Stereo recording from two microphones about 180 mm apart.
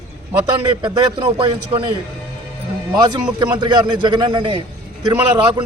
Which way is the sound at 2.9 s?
25° right (ahead or behind).